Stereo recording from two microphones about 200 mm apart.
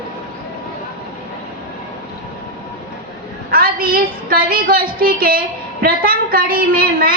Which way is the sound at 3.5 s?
45° right (ahead or behind).